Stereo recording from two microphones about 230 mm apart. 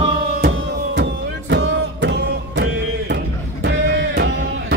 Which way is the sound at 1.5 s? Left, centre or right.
Right.